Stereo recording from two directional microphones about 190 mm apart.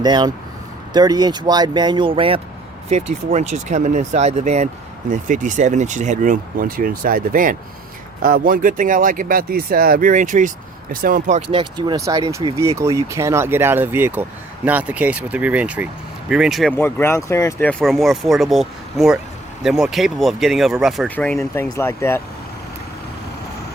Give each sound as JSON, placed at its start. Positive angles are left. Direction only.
{"t": 0.0, "sound": "speech", "side_deg": -20}
{"t": 11.5, "sound": "speech", "side_deg": -25}
{"t": 16.7, "sound": "speech", "side_deg": 10}